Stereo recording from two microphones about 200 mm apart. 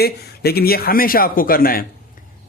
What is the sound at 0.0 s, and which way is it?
A man's voice, 50° left (ahead or behind).